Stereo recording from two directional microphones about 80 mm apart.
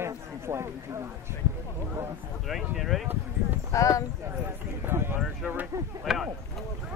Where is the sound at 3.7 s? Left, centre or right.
Left.